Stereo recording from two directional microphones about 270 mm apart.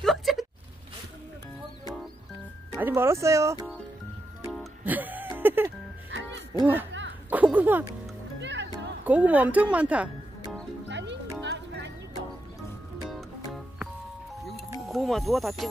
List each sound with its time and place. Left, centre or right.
0.0 s a sound: centre
2.7 s speech: centre
4.5 s music: centre
6.5 s speech: centre
6.9 s a sound: right
7.2 s a sound: centre
8.4 s music: right
9.0 s speech: centre
10.9 s music: right
14.9 s speech: centre